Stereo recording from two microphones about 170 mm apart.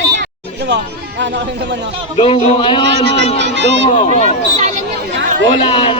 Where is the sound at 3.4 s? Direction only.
90° right.